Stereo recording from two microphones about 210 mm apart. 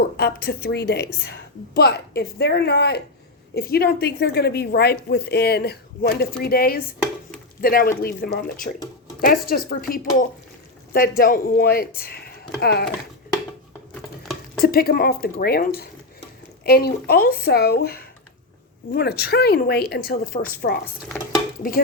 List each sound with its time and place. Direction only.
0.2 s a woman's voice: 45° left (ahead or behind)
14.6 s a woman's voice: 45° left (ahead or behind)